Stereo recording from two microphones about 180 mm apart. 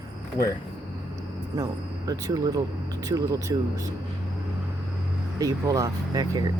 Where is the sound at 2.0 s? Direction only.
20° right (ahead or behind).